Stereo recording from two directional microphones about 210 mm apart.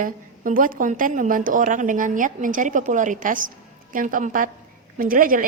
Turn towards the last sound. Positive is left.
turn(degrees=-40)  # may be behind; listen again after turning